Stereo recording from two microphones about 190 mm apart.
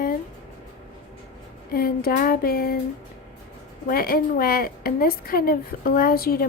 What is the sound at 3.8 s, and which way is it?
A woman's voice, 50° left (ahead or behind).